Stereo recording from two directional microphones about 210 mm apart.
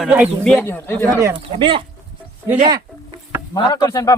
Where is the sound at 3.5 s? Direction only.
15° left (ahead or behind).